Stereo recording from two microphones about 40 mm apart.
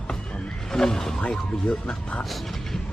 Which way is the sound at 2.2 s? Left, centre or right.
Centre.